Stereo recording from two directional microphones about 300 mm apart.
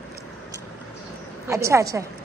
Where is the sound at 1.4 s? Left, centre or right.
Centre.